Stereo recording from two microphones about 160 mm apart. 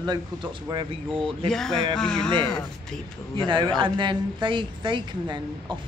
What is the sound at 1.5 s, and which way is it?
Speech, 5° left (ahead or behind).